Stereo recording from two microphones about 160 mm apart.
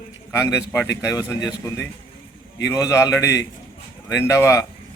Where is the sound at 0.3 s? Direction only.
15° left (ahead or behind).